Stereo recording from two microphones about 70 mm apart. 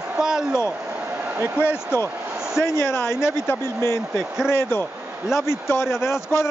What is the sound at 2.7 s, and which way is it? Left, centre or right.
Speech, left.